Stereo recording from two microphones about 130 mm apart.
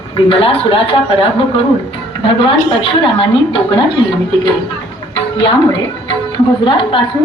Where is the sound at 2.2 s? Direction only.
40° left (ahead or behind).